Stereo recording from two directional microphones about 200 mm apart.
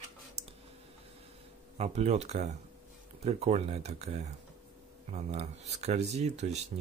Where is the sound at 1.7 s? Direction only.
30° right (ahead or behind).